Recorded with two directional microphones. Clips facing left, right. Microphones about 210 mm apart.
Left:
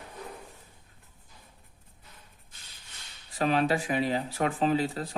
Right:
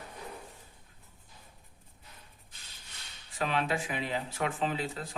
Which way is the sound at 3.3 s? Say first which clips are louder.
Left 6 dB; 40° left (ahead or behind).